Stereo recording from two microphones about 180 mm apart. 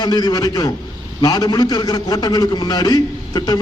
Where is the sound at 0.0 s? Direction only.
20° left (ahead or behind).